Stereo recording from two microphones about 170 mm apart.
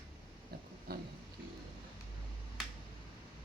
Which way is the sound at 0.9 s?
65° right (ahead or behind).